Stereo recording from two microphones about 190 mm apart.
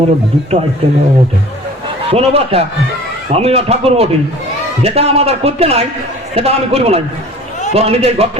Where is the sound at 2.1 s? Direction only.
30° right (ahead or behind).